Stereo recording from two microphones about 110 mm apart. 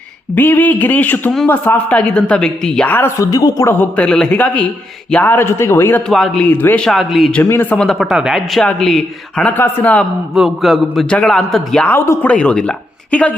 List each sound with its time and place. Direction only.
0.3 s a woman's voice: 15° left (ahead or behind)
2.9 s a man's voice: 20° left (ahead or behind)
3.2 s speech: 35° left (ahead or behind)
3.8 s a woman's voice: 10° left (ahead or behind)
6.1 s a man's voice: 5° left (ahead or behind)
6.5 s a woman's voice: 15° left (ahead or behind); by 7.3 s centre (ahead or behind)
7.6 s a man's voice: 10° left (ahead or behind)
9.5 s a woman's voice: 15° left (ahead or behind)
10.3 s a man's voice: centre (ahead or behind)
11.9 s a man's voice: 25° left (ahead or behind)
12.3 s speech: 10° left (ahead or behind)